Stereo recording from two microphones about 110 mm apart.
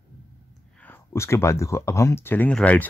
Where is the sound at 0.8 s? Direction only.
20° left (ahead or behind).